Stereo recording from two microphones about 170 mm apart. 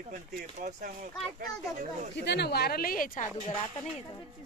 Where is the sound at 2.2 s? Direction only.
80° left; by 3.2 s 55° left (ahead or behind).